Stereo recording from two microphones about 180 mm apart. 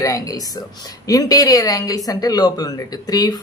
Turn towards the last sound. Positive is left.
turn(degrees=20)  # may be behind; listen again after turning